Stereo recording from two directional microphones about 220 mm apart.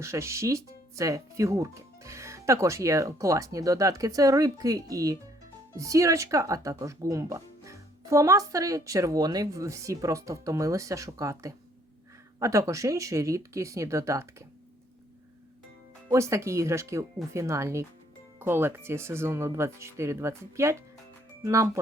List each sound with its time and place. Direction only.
0.0 s speech: 15° right (ahead or behind)
16.0 s speech: 15° right (ahead or behind)